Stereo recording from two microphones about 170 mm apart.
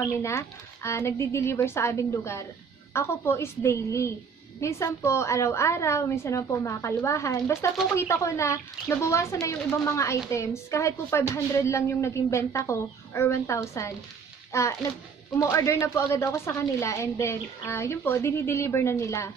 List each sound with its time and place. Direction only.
0.0 s a woman's voice: 15° left (ahead or behind)